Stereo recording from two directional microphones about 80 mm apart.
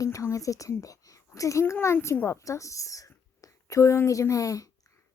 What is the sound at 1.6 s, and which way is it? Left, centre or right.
A child's voice, left.